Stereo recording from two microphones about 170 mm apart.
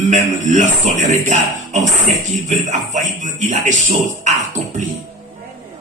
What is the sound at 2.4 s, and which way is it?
Speech, 45° right (ahead or behind).